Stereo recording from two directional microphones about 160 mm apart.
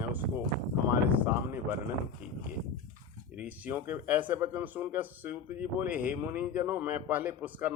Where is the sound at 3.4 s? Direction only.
10° right (ahead or behind).